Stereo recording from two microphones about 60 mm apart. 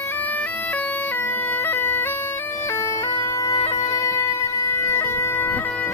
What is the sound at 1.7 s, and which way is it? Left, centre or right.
Bagpipes, left.